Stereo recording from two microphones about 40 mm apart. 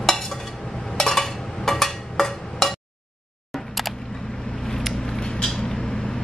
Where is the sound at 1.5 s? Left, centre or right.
Centre.